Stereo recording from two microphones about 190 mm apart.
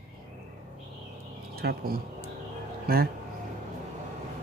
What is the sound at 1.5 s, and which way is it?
Speech, 55° right (ahead or behind).